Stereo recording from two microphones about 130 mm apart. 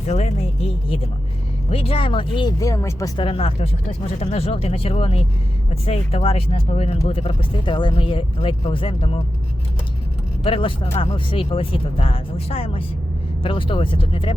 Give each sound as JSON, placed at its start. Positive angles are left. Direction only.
{"t": 0.1, "sound": "speech", "side_deg": 60}
{"t": 3.2, "sound": "speech", "side_deg": 45}
{"t": 10.4, "sound": "speech", "side_deg": 45}